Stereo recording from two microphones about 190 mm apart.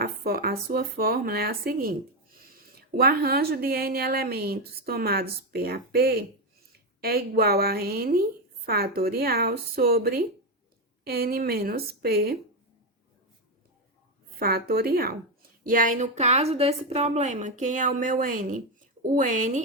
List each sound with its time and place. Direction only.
0.0 s a sound: 55° right (ahead or behind)
0.7 s a woman's voice: 55° right (ahead or behind)
14.3 s a woman's voice: 55° right (ahead or behind)